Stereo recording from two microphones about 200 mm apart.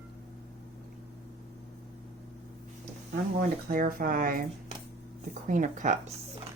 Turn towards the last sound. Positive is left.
turn(degrees=-40)  # may be behind; listen again after turning